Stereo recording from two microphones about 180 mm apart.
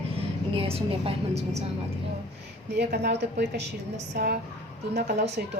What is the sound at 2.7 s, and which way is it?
Speech, 65° right (ahead or behind).